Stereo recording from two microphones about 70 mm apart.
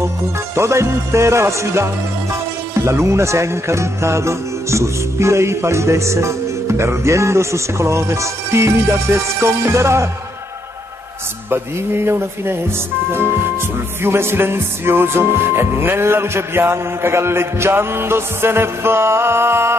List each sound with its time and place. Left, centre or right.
0.6 s music: right
11.5 s music: right